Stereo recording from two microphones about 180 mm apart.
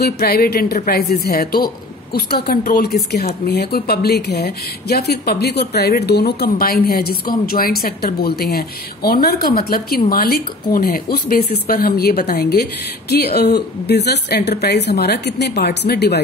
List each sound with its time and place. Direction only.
0.0 s speech: 60° left (ahead or behind)